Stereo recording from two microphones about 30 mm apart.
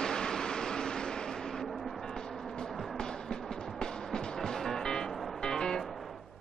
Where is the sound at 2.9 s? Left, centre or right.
Left.